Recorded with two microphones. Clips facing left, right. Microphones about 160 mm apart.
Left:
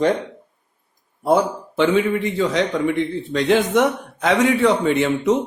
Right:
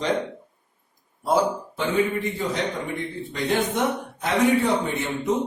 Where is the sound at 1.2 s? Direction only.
70° left (ahead or behind).